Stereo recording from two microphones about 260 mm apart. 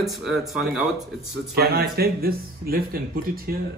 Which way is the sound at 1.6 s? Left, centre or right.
Right.